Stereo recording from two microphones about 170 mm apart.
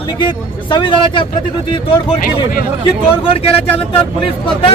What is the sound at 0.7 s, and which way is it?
Speech, 25° left (ahead or behind).